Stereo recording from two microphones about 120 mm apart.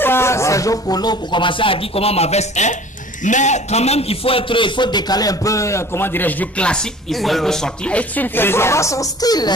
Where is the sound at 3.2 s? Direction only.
85° left.